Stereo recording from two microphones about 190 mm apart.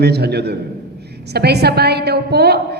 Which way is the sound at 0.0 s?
60° right (ahead or behind).